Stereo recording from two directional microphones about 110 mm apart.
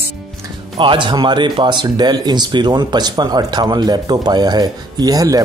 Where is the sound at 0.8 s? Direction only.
50° right (ahead or behind).